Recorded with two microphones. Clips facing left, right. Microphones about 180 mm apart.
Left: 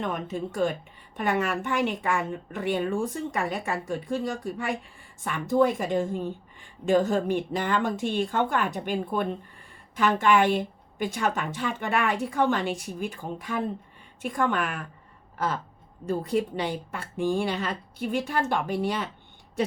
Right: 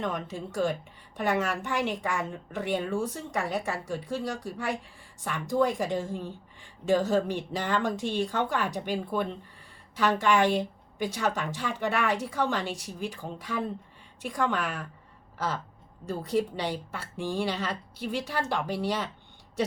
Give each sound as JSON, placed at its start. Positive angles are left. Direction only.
{"t": 0.0, "sound": "a woman's voice", "side_deg": 55}
{"t": 16.0, "sound": "a woman's voice", "side_deg": 55}